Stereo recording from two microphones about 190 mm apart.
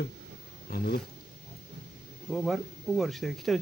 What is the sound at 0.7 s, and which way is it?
Speech, 55° left (ahead or behind).